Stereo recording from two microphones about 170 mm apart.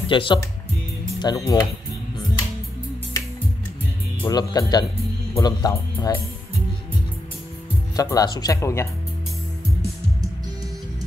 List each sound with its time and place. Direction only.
0.1 s speech: 30° left (ahead or behind)
4.2 s speech: 20° left (ahead or behind)
7.9 s speech: 20° left (ahead or behind)